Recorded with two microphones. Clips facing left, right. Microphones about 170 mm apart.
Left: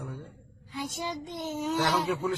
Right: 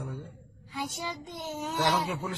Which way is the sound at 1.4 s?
Centre (ahead or behind).